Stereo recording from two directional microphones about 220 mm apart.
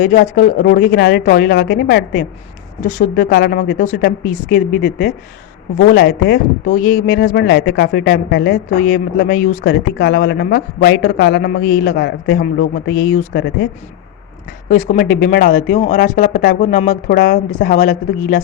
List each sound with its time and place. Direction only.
0.2 s speech: 50° left (ahead or behind)
6.7 s speech: 40° left (ahead or behind)
14.7 s speech: 40° left (ahead or behind)